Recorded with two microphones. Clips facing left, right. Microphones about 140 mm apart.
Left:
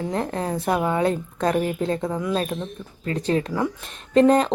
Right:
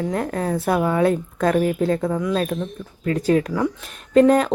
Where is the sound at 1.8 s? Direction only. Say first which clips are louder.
Right 4 dB; 5° right (ahead or behind).